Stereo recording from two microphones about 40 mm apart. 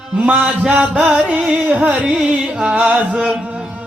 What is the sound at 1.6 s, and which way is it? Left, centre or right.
Speech, right.